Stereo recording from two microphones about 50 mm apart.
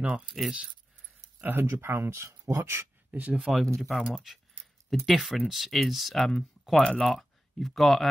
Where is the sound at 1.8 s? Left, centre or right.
Right.